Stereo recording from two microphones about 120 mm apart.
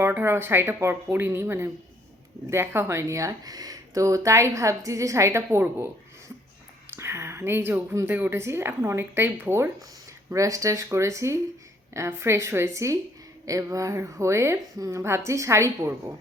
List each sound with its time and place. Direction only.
0.0 s speech: 20° right (ahead or behind)